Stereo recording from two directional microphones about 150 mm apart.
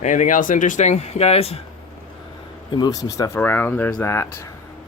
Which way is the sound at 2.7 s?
30° left (ahead or behind).